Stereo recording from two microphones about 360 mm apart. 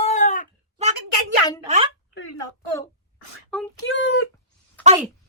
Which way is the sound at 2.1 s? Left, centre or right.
Left.